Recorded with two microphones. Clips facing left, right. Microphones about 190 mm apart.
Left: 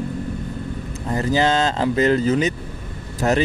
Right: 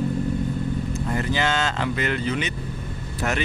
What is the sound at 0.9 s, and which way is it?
A man's voice, 35° left (ahead or behind).